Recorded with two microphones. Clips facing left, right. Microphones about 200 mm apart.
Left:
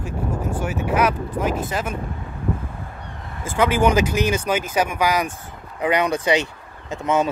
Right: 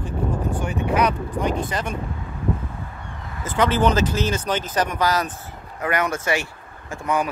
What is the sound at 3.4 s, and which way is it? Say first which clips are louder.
Speech: left 1 dB; 10° left (ahead or behind).